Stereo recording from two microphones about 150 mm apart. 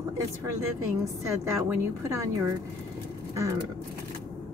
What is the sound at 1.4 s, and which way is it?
A woman's voice, 15° right (ahead or behind).